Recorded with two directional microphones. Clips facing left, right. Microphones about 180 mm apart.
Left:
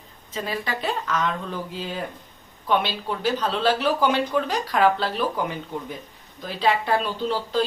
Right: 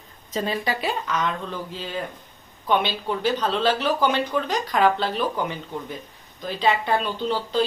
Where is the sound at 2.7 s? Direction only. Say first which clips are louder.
Right 1 dB; centre (ahead or behind).